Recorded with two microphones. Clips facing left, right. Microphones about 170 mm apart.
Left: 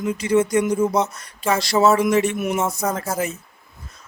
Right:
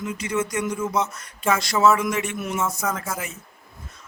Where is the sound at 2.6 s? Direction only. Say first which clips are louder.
Left 3 dB; 35° left (ahead or behind).